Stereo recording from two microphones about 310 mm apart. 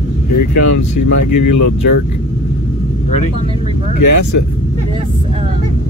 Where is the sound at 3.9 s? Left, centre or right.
Left.